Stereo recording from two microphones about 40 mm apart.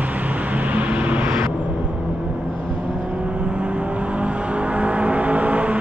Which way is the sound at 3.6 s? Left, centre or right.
Right.